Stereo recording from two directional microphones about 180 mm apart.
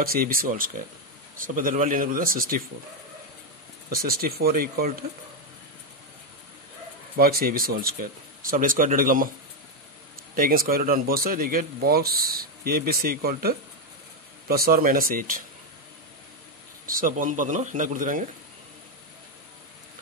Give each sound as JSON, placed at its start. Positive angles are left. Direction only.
{"t": 0.0, "sound": "speech", "side_deg": -55}
{"t": 3.9, "sound": "speech", "side_deg": -55}
{"t": 7.2, "sound": "speech", "side_deg": -55}
{"t": 10.3, "sound": "speech", "side_deg": -55}
{"t": 16.8, "sound": "speech", "side_deg": -50}